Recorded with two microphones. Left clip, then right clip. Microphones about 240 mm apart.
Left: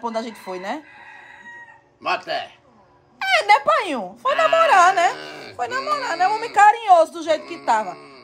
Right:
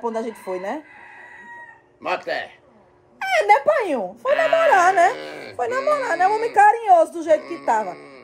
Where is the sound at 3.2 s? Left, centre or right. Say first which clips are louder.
Even; left.